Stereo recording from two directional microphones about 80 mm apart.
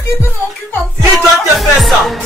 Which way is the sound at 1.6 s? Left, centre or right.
Centre.